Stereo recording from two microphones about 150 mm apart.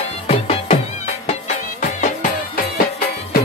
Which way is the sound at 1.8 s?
60° left (ahead or behind).